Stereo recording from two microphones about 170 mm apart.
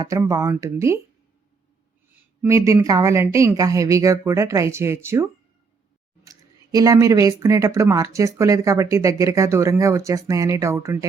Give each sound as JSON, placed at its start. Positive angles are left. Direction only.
{"t": 0.0, "sound": "a woman's voice", "side_deg": -20}
{"t": 2.4, "sound": "a woman's voice", "side_deg": -15}